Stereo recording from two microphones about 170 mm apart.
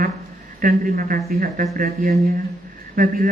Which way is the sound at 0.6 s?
55° right (ahead or behind).